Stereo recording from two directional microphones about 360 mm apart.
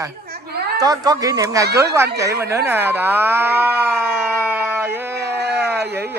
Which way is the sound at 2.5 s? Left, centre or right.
Centre.